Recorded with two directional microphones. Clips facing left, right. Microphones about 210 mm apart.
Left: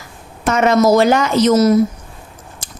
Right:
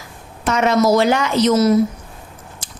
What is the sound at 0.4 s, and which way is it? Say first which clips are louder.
A woman's voice: left 3 dB; 50° left (ahead or behind).